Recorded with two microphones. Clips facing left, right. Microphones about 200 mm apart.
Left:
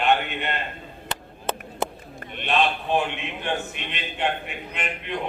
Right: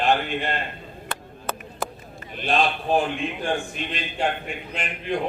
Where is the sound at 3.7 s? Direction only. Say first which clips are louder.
Right 4 dB; 35° right (ahead or behind).